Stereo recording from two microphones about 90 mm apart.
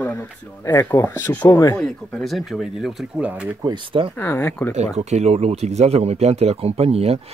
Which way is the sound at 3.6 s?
70° right (ahead or behind).